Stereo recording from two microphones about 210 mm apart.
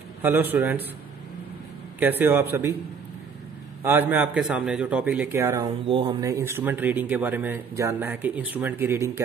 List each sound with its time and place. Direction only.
0.2 s speech: 10° right (ahead or behind)
2.0 s speech: 10° right (ahead or behind)
3.8 s speech: 10° right (ahead or behind)
5.9 s speech: 25° right (ahead or behind)
6.2 s speech: 15° right (ahead or behind)